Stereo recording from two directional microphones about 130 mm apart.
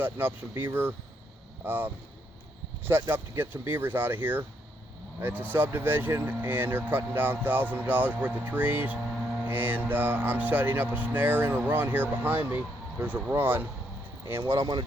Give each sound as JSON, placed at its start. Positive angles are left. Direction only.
{"t": 0.0, "sound": "speech", "side_deg": -15}